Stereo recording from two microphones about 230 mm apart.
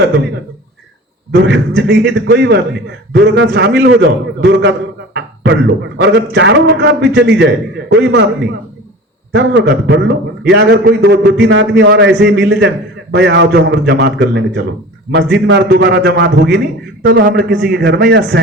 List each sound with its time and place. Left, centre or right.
1.5 s a man's voice: right